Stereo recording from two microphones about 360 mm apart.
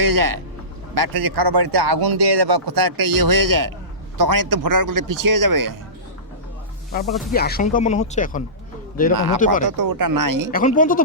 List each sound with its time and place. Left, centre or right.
0.0 s speech: right
7.1 s speech: centre
7.3 s speech: left
9.1 s speech: right
9.4 s speech: left
9.6 s speech: right
10.5 s speech: left